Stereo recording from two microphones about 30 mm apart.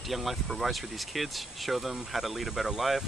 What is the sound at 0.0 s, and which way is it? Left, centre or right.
Speech, centre.